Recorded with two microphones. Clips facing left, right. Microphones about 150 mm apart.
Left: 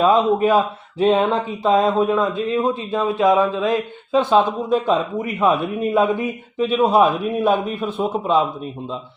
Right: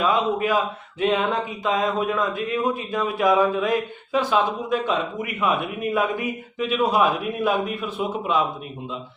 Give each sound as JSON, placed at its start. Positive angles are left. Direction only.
{"t": 0.0, "sound": "a man's voice", "side_deg": 35}